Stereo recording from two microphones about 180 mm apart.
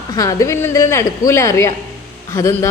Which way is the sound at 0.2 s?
20° left (ahead or behind).